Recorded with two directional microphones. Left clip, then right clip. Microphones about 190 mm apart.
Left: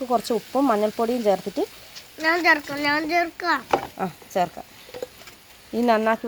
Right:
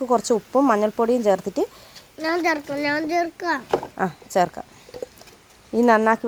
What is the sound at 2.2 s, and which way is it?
A child's voice, 50° right (ahead or behind).